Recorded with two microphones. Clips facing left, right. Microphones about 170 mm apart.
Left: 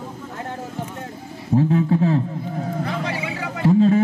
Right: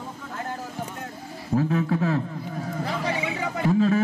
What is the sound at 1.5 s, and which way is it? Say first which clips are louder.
Speech: left 5 dB; 25° left (ahead or behind).